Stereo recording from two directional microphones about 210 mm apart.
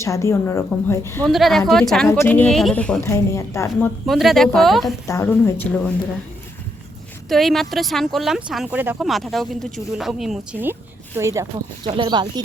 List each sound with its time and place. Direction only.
0.0 s a woman's voice: 15° left (ahead or behind)
1.3 s speech: centre (ahead or behind)
5.0 s a woman's voice: 10° left (ahead or behind)
7.3 s speech: centre (ahead or behind); by 12.3 s 20° right (ahead or behind)